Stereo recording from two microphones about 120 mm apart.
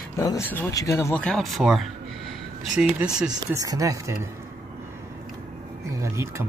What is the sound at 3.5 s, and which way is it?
Speech, 30° right (ahead or behind).